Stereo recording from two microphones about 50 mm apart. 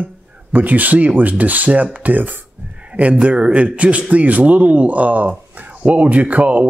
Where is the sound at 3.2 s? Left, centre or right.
Right.